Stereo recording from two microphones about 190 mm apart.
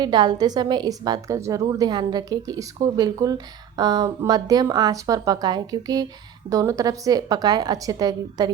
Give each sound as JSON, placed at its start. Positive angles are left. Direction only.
{"t": 0.0, "sound": "a woman's voice", "side_deg": -25}